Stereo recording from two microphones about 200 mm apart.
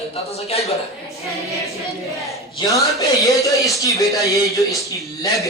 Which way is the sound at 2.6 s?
15° left (ahead or behind).